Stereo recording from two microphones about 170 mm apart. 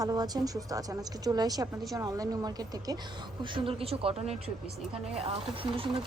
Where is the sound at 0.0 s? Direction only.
20° right (ahead or behind).